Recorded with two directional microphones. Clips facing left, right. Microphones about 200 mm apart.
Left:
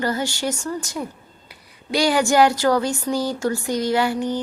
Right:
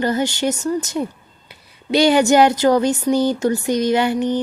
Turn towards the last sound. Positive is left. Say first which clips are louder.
# right 3 dB
turn(degrees=-20)  # may be behind; listen again after turning